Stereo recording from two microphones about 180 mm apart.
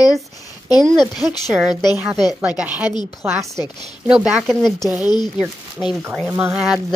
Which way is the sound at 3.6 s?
25° left (ahead or behind).